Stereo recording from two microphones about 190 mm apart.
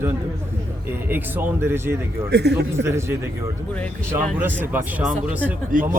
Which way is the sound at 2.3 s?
60° right (ahead or behind).